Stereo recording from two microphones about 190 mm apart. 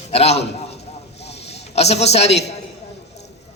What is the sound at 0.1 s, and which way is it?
A man's voice, 35° left (ahead or behind).